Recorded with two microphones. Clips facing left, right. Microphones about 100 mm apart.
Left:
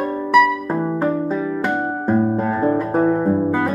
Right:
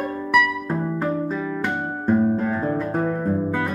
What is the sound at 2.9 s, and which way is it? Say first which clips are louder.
Guitar: left 6 dB; 30° left (ahead or behind).